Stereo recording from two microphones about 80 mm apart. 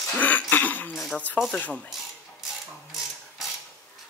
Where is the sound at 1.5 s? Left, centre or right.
Centre.